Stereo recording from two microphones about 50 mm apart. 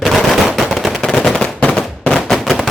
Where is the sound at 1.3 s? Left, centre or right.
Left.